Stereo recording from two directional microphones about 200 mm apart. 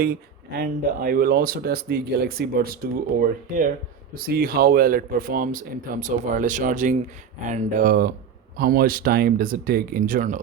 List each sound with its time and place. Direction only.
0.0 s speech: 50° right (ahead or behind)